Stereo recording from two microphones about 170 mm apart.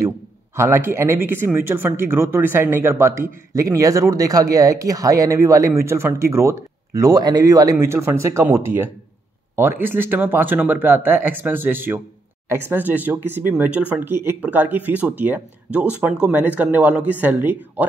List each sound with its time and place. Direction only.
0.6 s speech: 15° right (ahead or behind)